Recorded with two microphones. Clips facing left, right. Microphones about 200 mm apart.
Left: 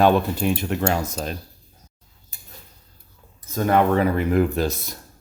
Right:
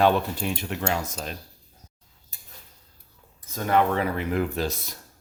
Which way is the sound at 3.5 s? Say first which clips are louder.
Left 4 dB; 50° left (ahead or behind).